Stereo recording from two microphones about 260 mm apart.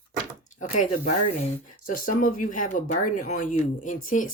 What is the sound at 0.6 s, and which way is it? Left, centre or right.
Speech, left.